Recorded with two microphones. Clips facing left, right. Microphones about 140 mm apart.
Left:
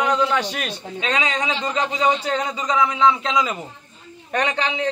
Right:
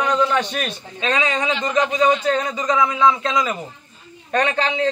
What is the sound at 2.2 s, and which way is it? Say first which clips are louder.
A man's voice: right 3 dB; 10° left (ahead or behind).